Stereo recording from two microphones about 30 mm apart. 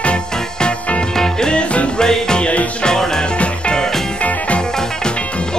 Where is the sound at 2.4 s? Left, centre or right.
Left.